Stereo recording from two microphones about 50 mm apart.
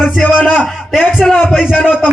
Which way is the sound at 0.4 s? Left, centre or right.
Left.